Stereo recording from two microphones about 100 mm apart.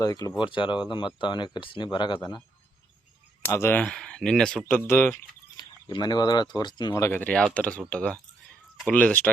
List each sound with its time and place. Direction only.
0.0 s speech: 40° left (ahead or behind)
0.4 s speech: 55° left (ahead or behind)
3.5 s speech: 25° left (ahead or behind)
3.8 s speech: 10° left (ahead or behind)
4.9 s speech: 25° left (ahead or behind)
5.6 s a sound: 40° left (ahead or behind)
5.9 s speech: 45° left (ahead or behind)
7.1 s speech: 15° left (ahead or behind)